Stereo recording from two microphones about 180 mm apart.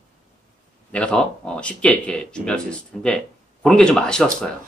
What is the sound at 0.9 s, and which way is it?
Speech, 5° left (ahead or behind).